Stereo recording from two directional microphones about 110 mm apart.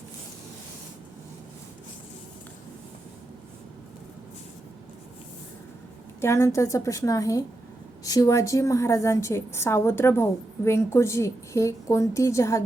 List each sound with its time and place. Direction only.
6.1 s a woman's voice: 25° left (ahead or behind)